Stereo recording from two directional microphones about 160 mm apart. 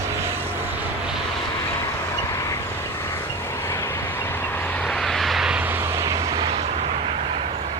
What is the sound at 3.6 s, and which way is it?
Vehicle, 15° left (ahead or behind).